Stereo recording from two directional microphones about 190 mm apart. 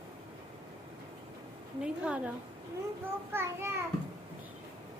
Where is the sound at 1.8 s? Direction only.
5° right (ahead or behind).